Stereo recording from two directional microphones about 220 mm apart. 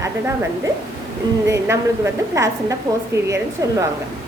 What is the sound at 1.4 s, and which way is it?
A woman's voice, 15° right (ahead or behind).